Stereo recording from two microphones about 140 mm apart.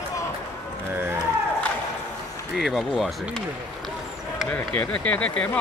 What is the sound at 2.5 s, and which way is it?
Speech, centre (ahead or behind).